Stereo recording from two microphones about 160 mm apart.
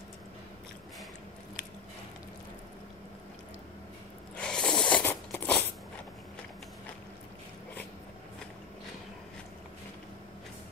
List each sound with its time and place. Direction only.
4.4 s crunch: 5° left (ahead or behind)